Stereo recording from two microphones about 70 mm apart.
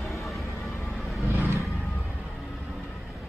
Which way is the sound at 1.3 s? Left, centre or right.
Right.